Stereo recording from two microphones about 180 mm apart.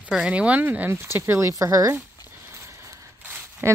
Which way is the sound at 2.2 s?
15° right (ahead or behind).